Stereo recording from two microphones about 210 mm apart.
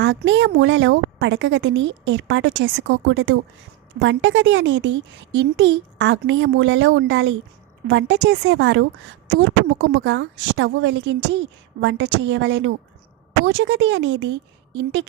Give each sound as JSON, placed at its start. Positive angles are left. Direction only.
{"t": 0.0, "sound": "a woman's voice", "side_deg": -60}
{"t": 9.9, "sound": "a woman's voice", "side_deg": -60}